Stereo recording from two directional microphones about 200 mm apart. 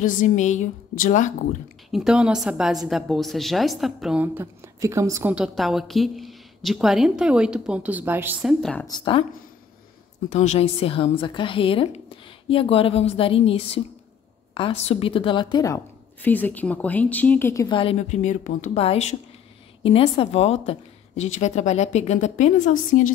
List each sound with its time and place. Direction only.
0.0 s a woman's voice: 40° left (ahead or behind)
1.9 s a woman's voice: centre (ahead or behind)
5.3 s a woman's voice: centre (ahead or behind)
8.8 s a woman's voice: 20° left (ahead or behind)
10.3 s a woman's voice: 35° left (ahead or behind); by 17.6 s 10° left (ahead or behind)
17.6 s a woman's voice: 25° left (ahead or behind)